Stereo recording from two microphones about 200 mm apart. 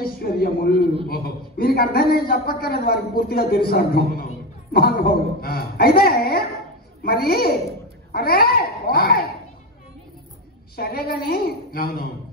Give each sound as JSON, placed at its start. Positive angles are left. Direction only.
{"t": 0.0, "sound": "a man's voice", "side_deg": 50}
{"t": 10.8, "sound": "a man's voice", "side_deg": 50}